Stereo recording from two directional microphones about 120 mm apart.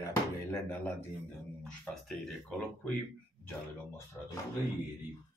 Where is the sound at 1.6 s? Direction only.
5° left (ahead or behind).